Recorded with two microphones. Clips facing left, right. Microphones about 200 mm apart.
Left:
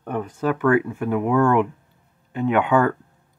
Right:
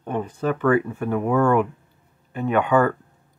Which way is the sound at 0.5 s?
10° left (ahead or behind).